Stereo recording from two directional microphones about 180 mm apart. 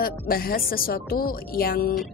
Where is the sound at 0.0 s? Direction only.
55° left (ahead or behind).